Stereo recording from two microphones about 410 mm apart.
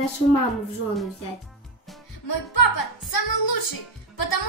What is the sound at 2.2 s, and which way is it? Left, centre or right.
A woman's voice, left.